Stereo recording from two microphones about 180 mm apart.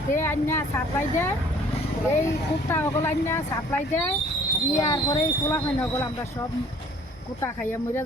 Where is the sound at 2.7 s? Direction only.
15° left (ahead or behind).